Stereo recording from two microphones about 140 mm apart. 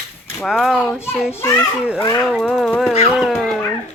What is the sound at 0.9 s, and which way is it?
Speech, 15° left (ahead or behind).